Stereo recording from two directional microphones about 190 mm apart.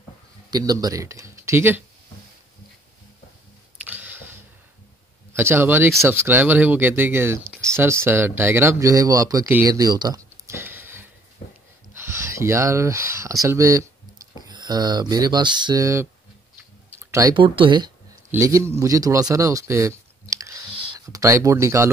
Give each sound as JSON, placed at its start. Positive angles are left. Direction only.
{"t": 0.5, "sound": "speech", "side_deg": -20}
{"t": 3.8, "sound": "a sound", "side_deg": -10}
{"t": 5.3, "sound": "speech", "side_deg": -10}